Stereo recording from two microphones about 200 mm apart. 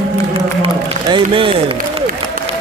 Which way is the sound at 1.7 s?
45° right (ahead or behind).